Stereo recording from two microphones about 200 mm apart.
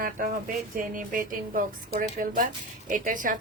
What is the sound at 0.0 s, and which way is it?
A woman's voice, 45° right (ahead or behind).